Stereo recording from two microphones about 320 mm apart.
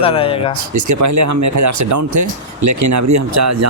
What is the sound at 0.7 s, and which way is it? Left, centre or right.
Speech, right.